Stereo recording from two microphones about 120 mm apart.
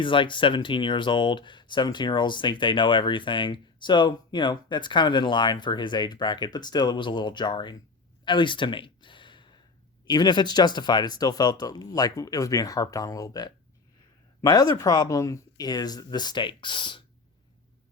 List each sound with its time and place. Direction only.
0.0 s speech: 45° left (ahead or behind)
8.2 s a sound: 40° left (ahead or behind)
10.1 s speech: 35° left (ahead or behind)